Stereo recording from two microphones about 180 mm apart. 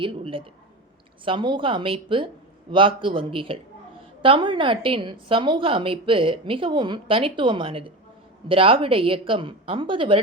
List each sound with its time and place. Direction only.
0.0 s a woman's voice: 30° right (ahead or behind)